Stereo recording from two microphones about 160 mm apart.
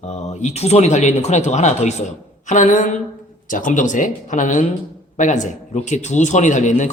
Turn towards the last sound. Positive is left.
turn(degrees=50)  # may be behind; listen again after turning